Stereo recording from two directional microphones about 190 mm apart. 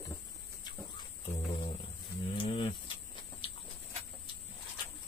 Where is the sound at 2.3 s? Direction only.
25° left (ahead or behind).